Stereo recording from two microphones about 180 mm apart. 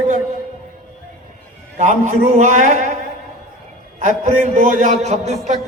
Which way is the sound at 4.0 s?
45° right (ahead or behind).